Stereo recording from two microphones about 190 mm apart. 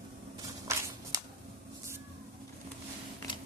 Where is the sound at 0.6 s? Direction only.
15° right (ahead or behind).